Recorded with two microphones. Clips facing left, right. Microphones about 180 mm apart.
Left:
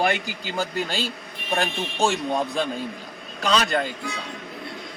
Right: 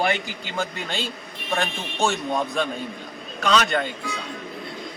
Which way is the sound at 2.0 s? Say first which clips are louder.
Even; 30° left (ahead or behind).